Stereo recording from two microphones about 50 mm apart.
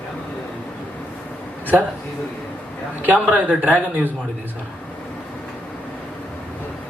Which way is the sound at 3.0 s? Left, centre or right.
Right.